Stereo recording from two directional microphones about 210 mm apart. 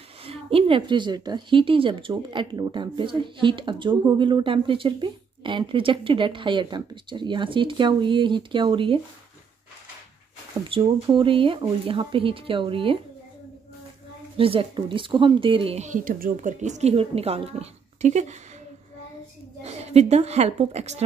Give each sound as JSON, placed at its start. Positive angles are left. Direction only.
{"t": 0.2, "sound": "a woman's voice", "side_deg": -25}
{"t": 10.7, "sound": "a woman's voice", "side_deg": -25}
{"t": 14.3, "sound": "a woman's voice", "side_deg": -25}
{"t": 19.6, "sound": "a woman's voice", "side_deg": -30}